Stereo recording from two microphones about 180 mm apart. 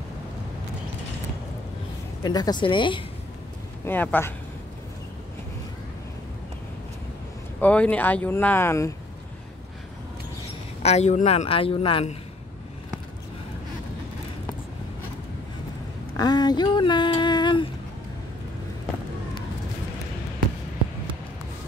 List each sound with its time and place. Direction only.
2.2 s a woman's voice: 20° left (ahead or behind)
3.8 s speech: 10° left (ahead or behind)
7.6 s speech: 5° left (ahead or behind)
10.8 s speech: 35° left (ahead or behind)
16.2 s a sound: 25° left (ahead or behind)